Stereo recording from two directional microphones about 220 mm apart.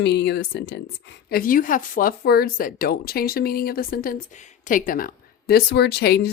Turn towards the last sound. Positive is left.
turn(degrees=45)  # may be behind; listen again after turning